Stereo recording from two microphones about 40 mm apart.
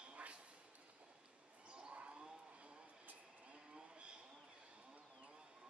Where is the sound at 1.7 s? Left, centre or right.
Right.